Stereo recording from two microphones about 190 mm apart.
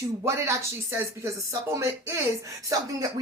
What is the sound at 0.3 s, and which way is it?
A woman's voice, 15° right (ahead or behind).